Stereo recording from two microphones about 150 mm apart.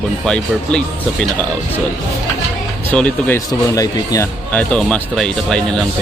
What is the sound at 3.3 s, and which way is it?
Speech, 20° left (ahead or behind).